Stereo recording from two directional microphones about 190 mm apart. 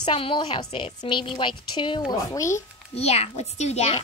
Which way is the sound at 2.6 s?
35° left (ahead or behind).